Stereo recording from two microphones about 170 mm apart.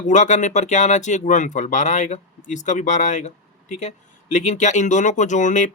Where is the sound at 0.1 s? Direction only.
45° left (ahead or behind).